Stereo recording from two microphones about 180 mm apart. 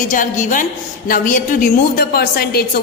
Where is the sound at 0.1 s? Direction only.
45° left (ahead or behind).